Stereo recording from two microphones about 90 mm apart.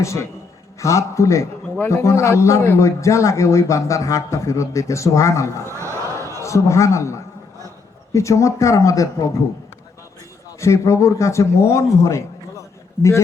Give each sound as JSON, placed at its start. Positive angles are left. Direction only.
{"t": 0.0, "sound": "a man's voice", "side_deg": 35}
{"t": 5.6, "sound": "a sound", "side_deg": -30}
{"t": 6.4, "sound": "a man's voice", "side_deg": 35}
{"t": 10.6, "sound": "a man's voice", "side_deg": 35}